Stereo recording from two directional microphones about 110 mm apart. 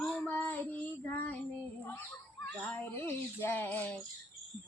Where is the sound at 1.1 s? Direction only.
15° left (ahead or behind).